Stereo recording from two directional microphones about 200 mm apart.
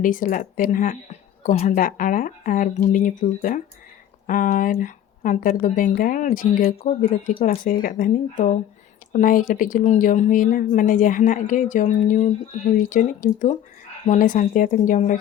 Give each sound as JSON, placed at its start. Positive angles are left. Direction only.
{"t": 0.0, "sound": "speech", "side_deg": 40}